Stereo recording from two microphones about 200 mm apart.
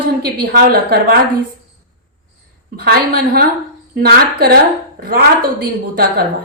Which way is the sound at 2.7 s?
50° right (ahead or behind).